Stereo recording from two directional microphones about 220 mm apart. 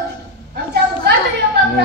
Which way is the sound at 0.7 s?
45° right (ahead or behind).